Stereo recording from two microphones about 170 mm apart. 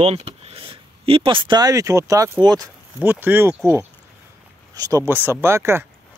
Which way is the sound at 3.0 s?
10° right (ahead or behind).